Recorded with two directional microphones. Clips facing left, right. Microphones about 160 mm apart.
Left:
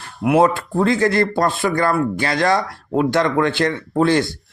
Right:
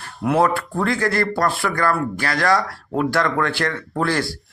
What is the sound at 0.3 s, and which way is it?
Speech, 20° left (ahead or behind).